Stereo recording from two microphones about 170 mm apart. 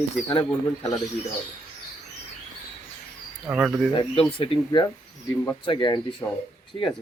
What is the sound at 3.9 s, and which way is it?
Speech, 30° left (ahead or behind).